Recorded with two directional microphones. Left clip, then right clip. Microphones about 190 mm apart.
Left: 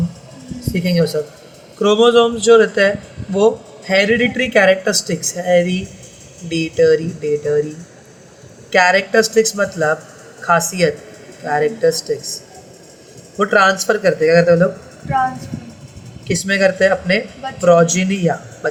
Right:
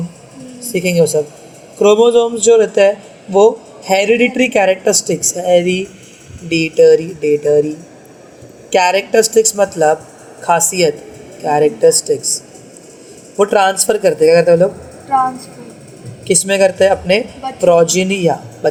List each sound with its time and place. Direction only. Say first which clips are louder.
0.7 s speech: right 5 dB; 15° right (ahead or behind)
8.7 s speech: right 1 dB; 15° right (ahead or behind)
13.4 s speech: right 1 dB; 15° right (ahead or behind)
16.2 s speech: right 3 dB; 15° right (ahead or behind)